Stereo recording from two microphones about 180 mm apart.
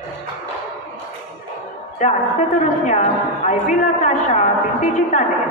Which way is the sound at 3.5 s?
40° left (ahead or behind).